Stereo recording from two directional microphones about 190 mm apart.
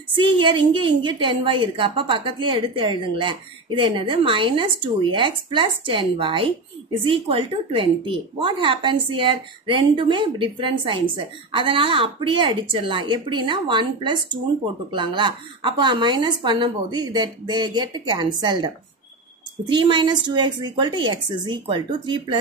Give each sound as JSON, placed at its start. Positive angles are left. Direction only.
{"t": 0.2, "sound": "a woman's voice", "side_deg": -25}